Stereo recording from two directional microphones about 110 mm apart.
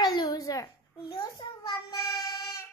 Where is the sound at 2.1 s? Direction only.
30° left (ahead or behind).